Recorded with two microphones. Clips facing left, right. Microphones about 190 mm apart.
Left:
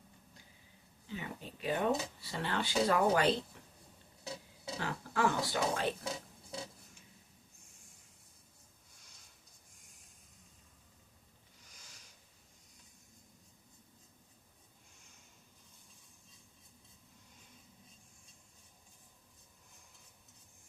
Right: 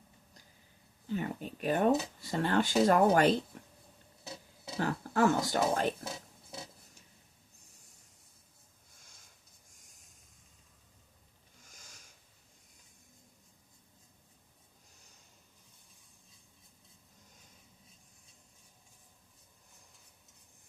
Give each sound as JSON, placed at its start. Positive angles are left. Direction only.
{"t": 1.0, "sound": "speech", "side_deg": -50}
{"t": 4.8, "sound": "speech", "side_deg": -45}
{"t": 11.6, "sound": "a sound", "side_deg": -45}